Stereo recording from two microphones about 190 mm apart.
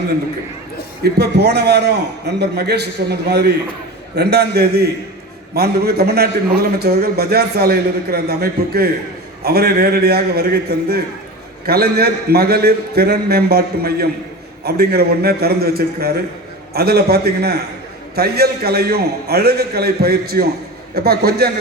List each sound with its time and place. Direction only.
1.0 s a man's voice: 60° right (ahead or behind)